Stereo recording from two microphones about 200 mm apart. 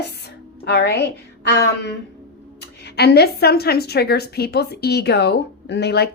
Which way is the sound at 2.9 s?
55° left (ahead or behind).